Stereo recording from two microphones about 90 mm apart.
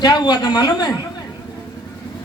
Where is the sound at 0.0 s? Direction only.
55° left (ahead or behind).